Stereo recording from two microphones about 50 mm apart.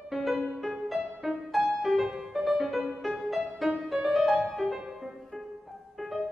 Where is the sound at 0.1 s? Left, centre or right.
Centre.